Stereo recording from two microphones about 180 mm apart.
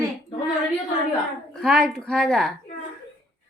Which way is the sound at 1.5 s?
Centre (ahead or behind).